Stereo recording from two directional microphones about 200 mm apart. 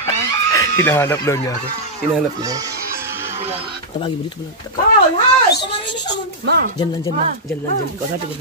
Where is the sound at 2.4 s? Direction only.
15° right (ahead or behind).